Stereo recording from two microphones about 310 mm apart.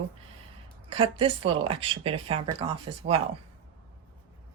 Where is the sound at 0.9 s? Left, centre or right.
Centre.